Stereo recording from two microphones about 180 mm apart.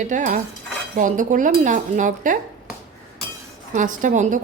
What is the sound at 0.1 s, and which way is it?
Speech, 45° right (ahead or behind).